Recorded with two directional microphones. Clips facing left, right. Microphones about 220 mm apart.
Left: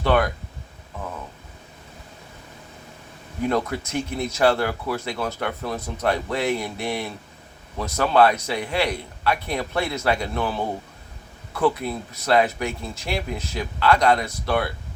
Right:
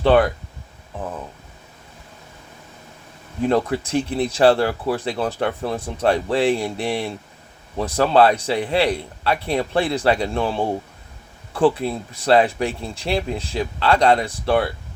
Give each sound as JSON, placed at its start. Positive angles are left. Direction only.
{"t": 0.0, "sound": "speech", "side_deg": -30}
{"t": 3.4, "sound": "speech", "side_deg": -30}